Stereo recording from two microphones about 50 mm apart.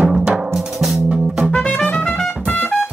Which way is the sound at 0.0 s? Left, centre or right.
Right.